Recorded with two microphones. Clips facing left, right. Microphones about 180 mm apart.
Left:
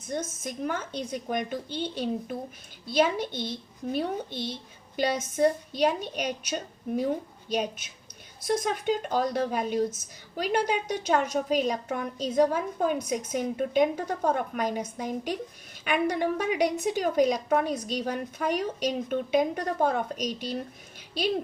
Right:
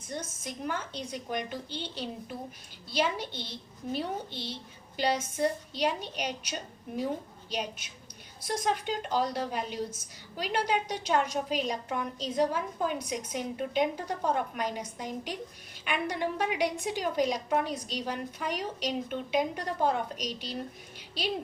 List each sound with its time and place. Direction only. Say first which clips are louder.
0.1 s a woman's voice: left 5 dB; 50° left (ahead or behind)